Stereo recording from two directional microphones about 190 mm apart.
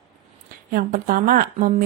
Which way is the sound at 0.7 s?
50° right (ahead or behind).